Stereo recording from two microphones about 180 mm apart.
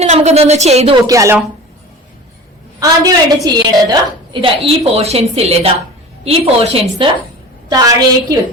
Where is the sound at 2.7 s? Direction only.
20° right (ahead or behind).